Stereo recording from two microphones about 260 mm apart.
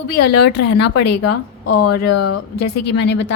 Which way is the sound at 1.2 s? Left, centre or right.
Left.